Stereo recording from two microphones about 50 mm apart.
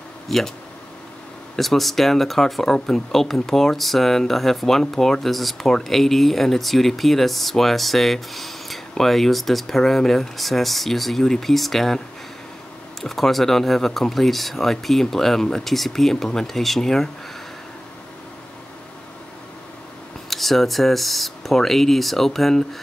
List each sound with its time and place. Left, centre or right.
0.3 s speech: centre
1.6 s speech: centre
13.0 s speech: centre
20.2 s speech: centre